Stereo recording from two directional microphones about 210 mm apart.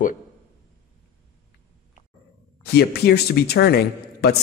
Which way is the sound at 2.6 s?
50° left (ahead or behind).